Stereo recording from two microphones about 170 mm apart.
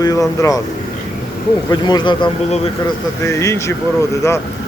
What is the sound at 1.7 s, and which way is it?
Speech, 25° left (ahead or behind).